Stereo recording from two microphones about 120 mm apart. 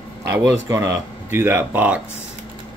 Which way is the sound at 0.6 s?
25° right (ahead or behind).